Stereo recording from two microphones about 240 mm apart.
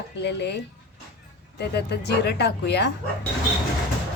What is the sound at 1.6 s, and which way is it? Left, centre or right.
Speech, left.